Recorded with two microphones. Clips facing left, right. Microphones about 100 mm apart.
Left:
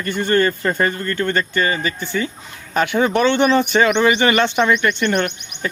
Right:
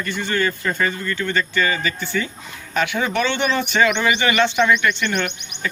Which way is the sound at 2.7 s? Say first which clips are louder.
Left 4 dB; 40° left (ahead or behind).